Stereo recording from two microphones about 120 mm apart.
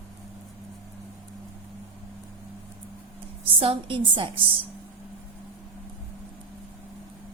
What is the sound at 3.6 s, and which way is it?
Speech, 45° right (ahead or behind).